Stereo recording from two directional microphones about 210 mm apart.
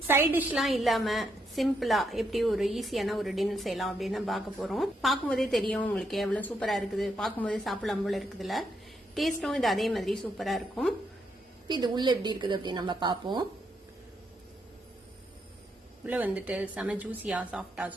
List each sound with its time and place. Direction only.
0.1 s a woman's voice: 10° right (ahead or behind)
11.7 s a woman's voice: 20° right (ahead or behind)
16.0 s a woman's voice: 5° right (ahead or behind)